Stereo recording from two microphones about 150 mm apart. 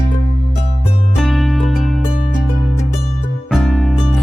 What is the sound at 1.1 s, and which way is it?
Music, centre (ahead or behind).